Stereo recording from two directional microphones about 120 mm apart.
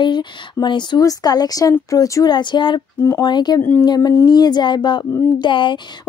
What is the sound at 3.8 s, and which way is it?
Speech, 35° left (ahead or behind).